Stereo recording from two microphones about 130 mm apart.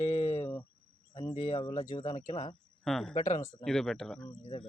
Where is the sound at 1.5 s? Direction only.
35° left (ahead or behind).